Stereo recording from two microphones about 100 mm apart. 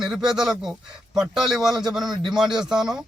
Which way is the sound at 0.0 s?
5° right (ahead or behind).